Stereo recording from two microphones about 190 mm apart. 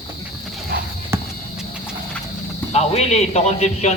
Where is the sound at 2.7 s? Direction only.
35° left (ahead or behind).